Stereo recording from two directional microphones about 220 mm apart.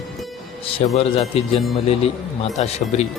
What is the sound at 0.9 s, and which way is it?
A man's voice, 25° left (ahead or behind).